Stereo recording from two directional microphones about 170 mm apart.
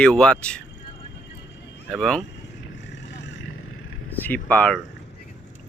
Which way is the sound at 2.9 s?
90° left.